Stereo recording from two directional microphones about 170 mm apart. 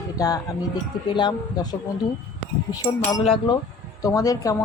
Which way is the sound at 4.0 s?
20° left (ahead or behind).